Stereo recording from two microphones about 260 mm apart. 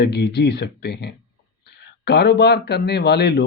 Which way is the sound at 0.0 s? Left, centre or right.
Left.